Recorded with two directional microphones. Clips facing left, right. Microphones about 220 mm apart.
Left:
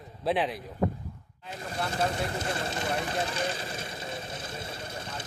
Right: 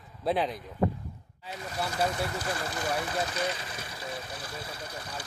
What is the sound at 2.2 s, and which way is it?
Vehicle, 25° left (ahead or behind).